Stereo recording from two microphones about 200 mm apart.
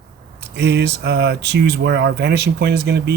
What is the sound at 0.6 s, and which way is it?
Speech, 55° right (ahead or behind).